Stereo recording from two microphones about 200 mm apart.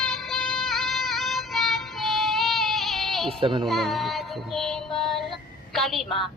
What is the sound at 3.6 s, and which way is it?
Child singing, centre (ahead or behind).